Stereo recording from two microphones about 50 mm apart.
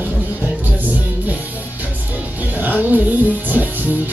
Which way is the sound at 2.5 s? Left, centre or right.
Right.